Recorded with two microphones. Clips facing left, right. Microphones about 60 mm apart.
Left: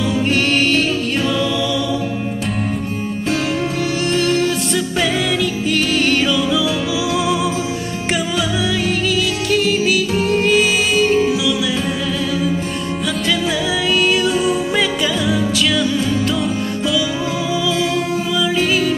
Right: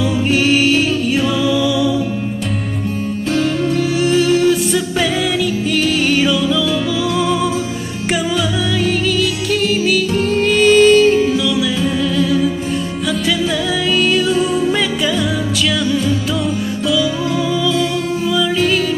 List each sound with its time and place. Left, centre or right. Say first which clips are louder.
0.3 s music: right 4 dB; centre
3.3 s music: right 3 dB; centre
4.0 s music: right 4 dB; centre
13.8 s music: right 1 dB; centre
16.8 s music: right 3 dB; centre